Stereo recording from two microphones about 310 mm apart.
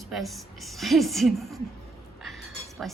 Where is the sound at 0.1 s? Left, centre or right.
Centre.